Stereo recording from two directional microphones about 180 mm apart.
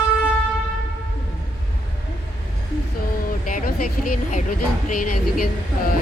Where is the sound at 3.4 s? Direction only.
45° left (ahead or behind).